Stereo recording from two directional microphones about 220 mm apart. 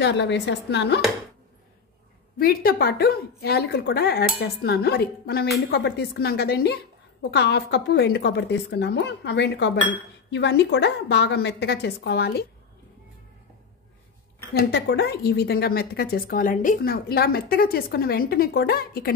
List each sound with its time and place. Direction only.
0.0 s a woman's voice: 50° left (ahead or behind)
2.3 s a woman's voice: 40° left (ahead or behind)
14.7 s a woman's voice: 50° left (ahead or behind)